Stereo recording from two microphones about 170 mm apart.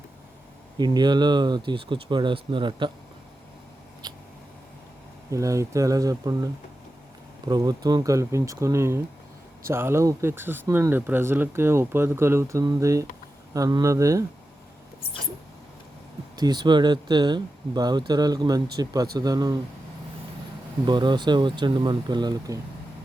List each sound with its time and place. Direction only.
0.8 s speech: 25° right (ahead or behind)
4.0 s a sound: 25° right (ahead or behind)
5.3 s speech: 20° right (ahead or behind)
16.3 s speech: 25° right (ahead or behind)
20.8 s speech: 25° right (ahead or behind)